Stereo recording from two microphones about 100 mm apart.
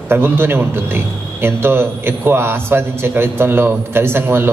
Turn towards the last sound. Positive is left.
turn(degrees=-25)  # may be behind; listen again after turning